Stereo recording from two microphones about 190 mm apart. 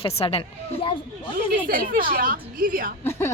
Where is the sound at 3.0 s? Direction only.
10° left (ahead or behind).